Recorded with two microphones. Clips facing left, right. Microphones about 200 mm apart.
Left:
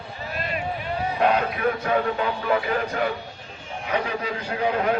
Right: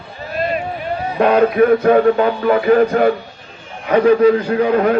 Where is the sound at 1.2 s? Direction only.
55° right (ahead or behind).